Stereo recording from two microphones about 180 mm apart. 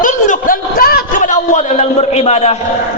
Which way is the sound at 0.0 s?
45° left (ahead or behind).